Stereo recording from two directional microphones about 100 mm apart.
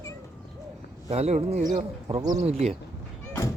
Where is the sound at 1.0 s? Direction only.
90° right.